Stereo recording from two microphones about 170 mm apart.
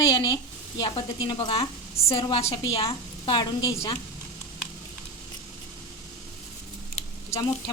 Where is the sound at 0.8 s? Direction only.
30° left (ahead or behind).